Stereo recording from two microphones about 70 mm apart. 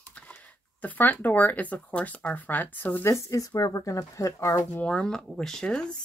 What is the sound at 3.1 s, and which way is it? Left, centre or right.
Speech, left.